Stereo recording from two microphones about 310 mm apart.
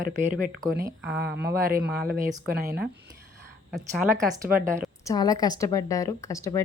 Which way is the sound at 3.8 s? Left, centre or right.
Centre.